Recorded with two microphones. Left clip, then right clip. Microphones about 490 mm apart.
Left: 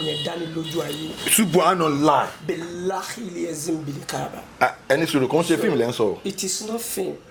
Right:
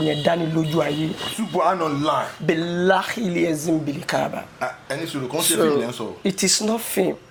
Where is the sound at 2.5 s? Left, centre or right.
Right.